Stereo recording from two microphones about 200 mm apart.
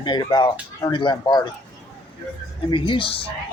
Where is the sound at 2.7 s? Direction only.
25° left (ahead or behind).